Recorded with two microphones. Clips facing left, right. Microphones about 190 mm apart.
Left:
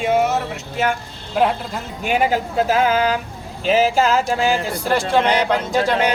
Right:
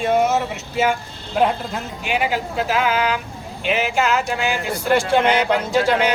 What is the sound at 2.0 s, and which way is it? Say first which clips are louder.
Speech: left 4 dB; 40° left (ahead or behind).